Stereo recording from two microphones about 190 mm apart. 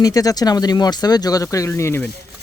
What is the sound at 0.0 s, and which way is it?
Speech, 20° left (ahead or behind).